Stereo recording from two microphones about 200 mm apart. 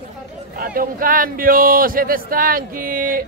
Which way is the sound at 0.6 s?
45° right (ahead or behind).